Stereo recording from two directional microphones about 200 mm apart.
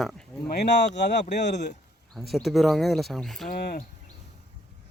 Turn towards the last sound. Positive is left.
turn(degrees=45)  # may be behind; listen again after turning